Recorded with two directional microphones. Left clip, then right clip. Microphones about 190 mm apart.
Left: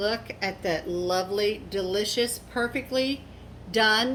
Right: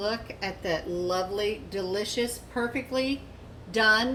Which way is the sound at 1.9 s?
15° left (ahead or behind).